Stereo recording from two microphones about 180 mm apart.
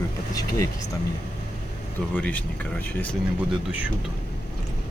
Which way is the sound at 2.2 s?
10° left (ahead or behind).